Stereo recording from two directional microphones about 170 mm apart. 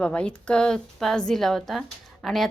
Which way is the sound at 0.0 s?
5° left (ahead or behind).